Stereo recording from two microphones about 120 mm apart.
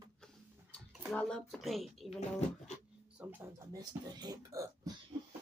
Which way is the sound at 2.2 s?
70° left (ahead or behind).